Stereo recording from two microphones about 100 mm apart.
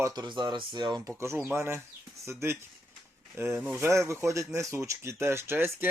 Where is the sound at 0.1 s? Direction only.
50° right (ahead or behind).